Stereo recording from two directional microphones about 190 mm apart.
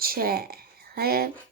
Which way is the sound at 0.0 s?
50° right (ahead or behind).